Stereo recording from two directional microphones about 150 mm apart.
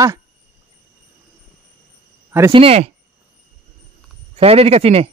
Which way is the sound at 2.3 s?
20° right (ahead or behind).